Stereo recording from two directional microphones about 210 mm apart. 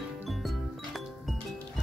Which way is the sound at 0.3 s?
Centre (ahead or behind).